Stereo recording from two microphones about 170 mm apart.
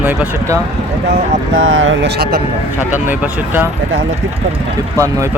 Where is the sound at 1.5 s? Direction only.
90° right; by 2.4 s 65° right (ahead or behind).